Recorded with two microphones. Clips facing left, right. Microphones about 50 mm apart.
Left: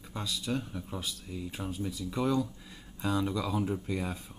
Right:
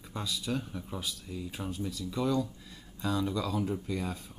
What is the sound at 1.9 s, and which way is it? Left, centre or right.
Speech, centre.